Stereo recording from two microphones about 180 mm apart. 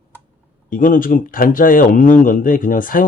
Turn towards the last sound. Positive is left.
turn(degrees=50)  # may be behind; listen again after turning